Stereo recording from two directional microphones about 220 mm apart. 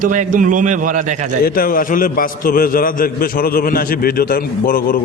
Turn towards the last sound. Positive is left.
turn(degrees=40)  # may be behind; listen again after turning